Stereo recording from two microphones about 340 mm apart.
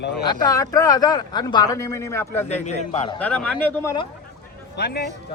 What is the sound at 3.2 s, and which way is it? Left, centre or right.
Speech, centre.